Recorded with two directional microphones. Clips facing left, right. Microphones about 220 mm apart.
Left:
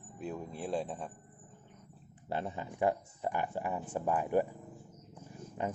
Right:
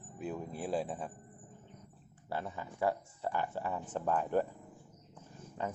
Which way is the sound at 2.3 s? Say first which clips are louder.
Left 3 dB; 20° left (ahead or behind).